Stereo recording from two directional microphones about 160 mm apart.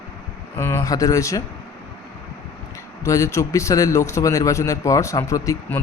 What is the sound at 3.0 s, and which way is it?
A man's voice, 20° left (ahead or behind).